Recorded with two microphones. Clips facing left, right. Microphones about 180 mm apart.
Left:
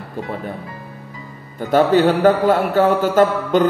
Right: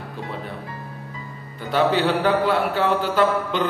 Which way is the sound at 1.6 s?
45° left (ahead or behind).